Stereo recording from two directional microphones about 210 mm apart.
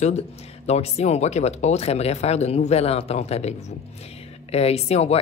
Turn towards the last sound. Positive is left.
turn(degrees=30)  # may be behind; listen again after turning